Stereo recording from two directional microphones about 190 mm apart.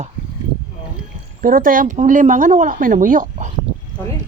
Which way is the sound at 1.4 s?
45° right (ahead or behind).